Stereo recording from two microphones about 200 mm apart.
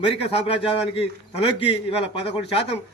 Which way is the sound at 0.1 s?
30° left (ahead or behind).